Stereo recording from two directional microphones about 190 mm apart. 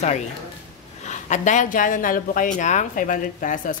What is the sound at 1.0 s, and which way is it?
A woman's voice, 40° left (ahead or behind).